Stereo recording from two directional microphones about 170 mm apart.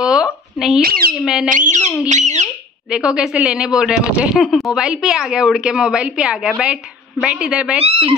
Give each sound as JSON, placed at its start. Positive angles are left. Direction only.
{"t": 0.0, "sound": "a sound", "side_deg": -5}
{"t": 0.8, "sound": "speech", "side_deg": -60}
{"t": 1.1, "sound": "a woman's voice", "side_deg": 0}
{"t": 2.0, "sound": "speech", "side_deg": -45}
{"t": 2.9, "sound": "a woman's voice", "side_deg": -5}
{"t": 7.8, "sound": "speech", "side_deg": -35}